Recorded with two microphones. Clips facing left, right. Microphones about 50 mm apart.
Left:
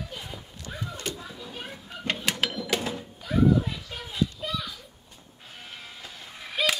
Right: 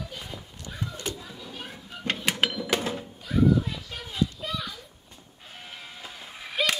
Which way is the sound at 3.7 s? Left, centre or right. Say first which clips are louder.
Even; centre.